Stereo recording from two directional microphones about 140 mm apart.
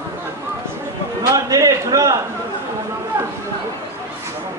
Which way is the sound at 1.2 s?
25° right (ahead or behind).